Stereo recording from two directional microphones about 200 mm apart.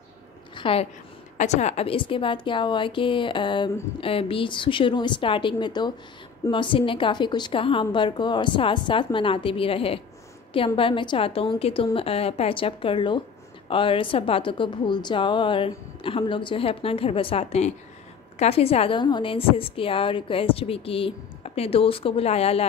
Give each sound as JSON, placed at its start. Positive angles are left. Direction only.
{"t": 0.6, "sound": "a woman's voice", "side_deg": 25}